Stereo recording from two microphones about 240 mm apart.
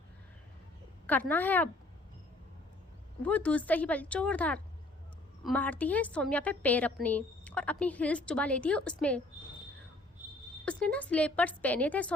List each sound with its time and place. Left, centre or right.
1.0 s a woman's voice: centre
3.2 s a woman's voice: centre
10.7 s a woman's voice: centre